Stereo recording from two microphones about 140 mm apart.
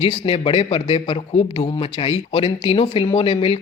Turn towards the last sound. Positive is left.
turn(degrees=45)  # may be behind; listen again after turning